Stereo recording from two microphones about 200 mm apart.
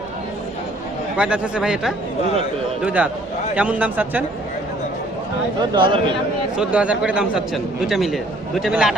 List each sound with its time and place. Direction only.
1.1 s a man's voice: 5° right (ahead or behind)
5.5 s speech: 25° right (ahead or behind)
6.6 s a man's voice: 5° right (ahead or behind)